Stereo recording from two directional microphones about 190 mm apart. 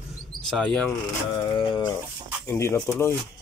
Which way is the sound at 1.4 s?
20° left (ahead or behind).